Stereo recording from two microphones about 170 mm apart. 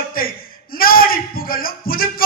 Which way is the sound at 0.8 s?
60° left (ahead or behind).